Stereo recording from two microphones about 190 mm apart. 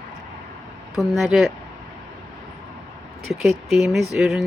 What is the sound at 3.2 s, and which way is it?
Speech, centre (ahead or behind).